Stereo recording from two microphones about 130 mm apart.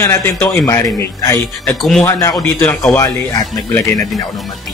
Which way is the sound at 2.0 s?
25° left (ahead or behind).